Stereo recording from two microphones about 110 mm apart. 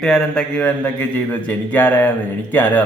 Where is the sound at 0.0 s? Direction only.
5° left (ahead or behind).